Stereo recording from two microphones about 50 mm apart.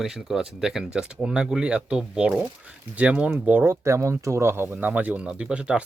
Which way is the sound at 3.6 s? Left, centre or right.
Right.